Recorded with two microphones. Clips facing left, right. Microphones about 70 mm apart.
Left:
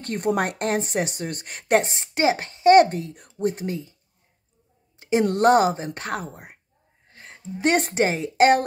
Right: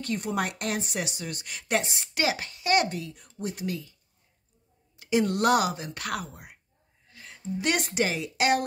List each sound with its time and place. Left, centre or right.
0.0 s a woman's voice: left
4.9 s a woman's voice: left
7.1 s a sound: left
7.5 s a woman's voice: left